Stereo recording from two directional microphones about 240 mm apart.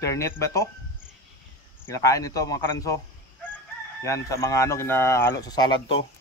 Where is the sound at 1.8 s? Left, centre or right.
Centre.